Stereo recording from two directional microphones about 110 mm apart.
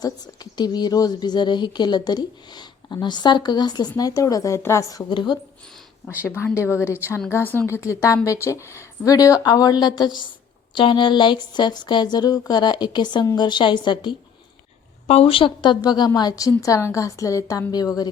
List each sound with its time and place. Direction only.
0.0 s speech: 40° left (ahead or behind)
5.1 s speech: 45° left (ahead or behind)
6.2 s speech: 20° left (ahead or behind); by 14.2 s 45° left (ahead or behind)
15.0 s speech: 70° left (ahead or behind); by 18.1 s 35° left (ahead or behind)